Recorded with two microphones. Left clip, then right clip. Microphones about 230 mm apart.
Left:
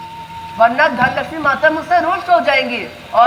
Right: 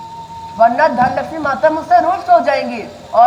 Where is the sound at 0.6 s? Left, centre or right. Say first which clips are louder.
Right 1 dB; right.